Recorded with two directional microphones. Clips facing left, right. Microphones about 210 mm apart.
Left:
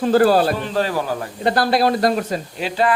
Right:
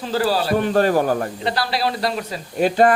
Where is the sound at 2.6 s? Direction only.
50° right (ahead or behind).